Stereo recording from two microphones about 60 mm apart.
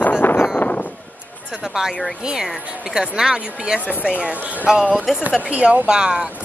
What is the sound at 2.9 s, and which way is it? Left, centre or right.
Speech, centre.